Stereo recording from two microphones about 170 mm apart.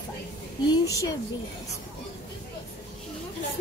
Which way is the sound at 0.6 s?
20° left (ahead or behind).